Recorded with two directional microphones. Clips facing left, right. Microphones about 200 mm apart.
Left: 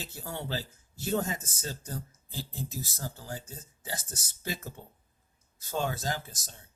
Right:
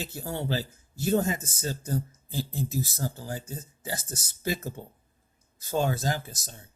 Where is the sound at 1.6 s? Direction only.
45° right (ahead or behind).